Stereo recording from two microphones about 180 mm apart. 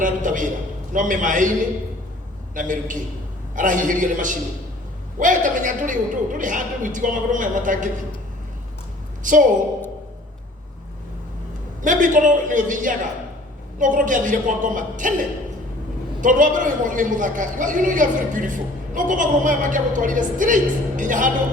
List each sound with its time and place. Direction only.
0.0 s a man's voice: 45° right (ahead or behind)
2.6 s a man's voice: 45° right (ahead or behind)
9.2 s a man's voice: 45° right (ahead or behind)
11.8 s a man's voice: 45° right (ahead or behind)